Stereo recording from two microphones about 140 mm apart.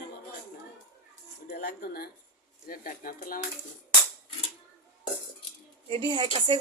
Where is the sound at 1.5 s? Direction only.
90° left.